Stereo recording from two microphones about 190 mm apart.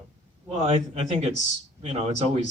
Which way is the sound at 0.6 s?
30° right (ahead or behind).